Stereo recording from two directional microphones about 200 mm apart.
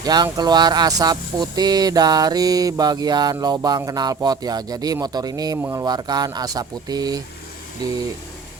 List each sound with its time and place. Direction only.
0.0 s speech: 20° right (ahead or behind)